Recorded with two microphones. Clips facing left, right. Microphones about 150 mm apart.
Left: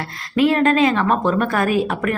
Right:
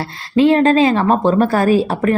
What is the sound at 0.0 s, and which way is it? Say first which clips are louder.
A woman's voice: right 4 dB; 30° right (ahead or behind).